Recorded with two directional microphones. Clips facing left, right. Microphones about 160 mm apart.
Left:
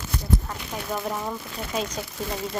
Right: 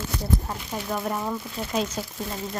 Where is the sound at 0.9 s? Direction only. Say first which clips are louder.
Right 1 dB; centre (ahead or behind).